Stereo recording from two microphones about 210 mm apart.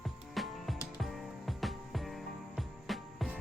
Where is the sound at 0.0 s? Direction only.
Centre (ahead or behind).